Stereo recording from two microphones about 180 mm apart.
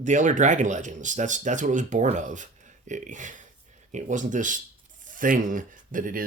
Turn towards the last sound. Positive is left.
turn(degrees=-50)  # may be behind; listen again after turning